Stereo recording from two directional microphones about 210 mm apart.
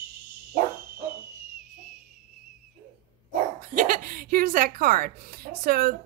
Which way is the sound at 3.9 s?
40° right (ahead or behind).